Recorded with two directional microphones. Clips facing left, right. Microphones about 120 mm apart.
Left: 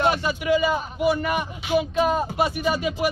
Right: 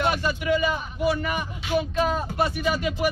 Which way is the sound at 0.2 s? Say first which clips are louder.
Left 2 dB; 15° left (ahead or behind).